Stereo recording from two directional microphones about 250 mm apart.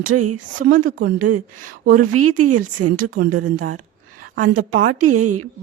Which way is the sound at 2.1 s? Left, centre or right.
Right.